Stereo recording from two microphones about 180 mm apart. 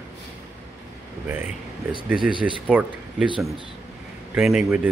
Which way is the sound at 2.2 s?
25° right (ahead or behind).